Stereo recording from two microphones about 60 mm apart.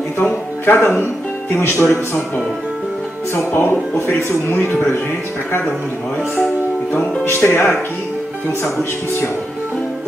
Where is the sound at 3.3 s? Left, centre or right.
Left.